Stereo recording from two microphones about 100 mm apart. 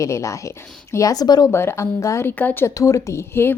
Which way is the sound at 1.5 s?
25° left (ahead or behind).